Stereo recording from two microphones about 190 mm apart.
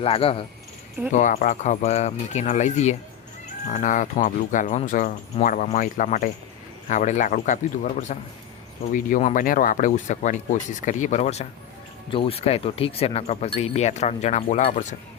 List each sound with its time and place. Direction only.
0.0 s speech: 30° left (ahead or behind)
1.1 s speech: 40° left (ahead or behind)